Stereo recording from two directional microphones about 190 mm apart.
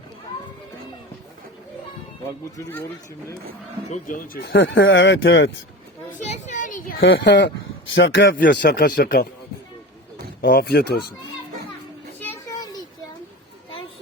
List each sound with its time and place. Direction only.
3.8 s speech: 40° left (ahead or behind); by 5.5 s 70° left (ahead or behind)
6.1 s a sound: 40° left (ahead or behind)
7.0 s speech: 75° left (ahead or behind)
8.6 s speech: 50° left (ahead or behind)
10.4 s speech: 50° left (ahead or behind)
12.2 s a sound: 15° left (ahead or behind)